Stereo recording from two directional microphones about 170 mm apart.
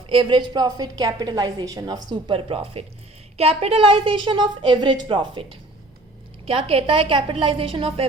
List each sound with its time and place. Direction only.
0.1 s a woman's voice: 30° right (ahead or behind)